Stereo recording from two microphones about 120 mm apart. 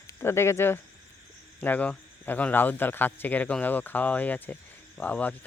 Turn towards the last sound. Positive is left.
turn(degrees=15)  # may be behind; listen again after turning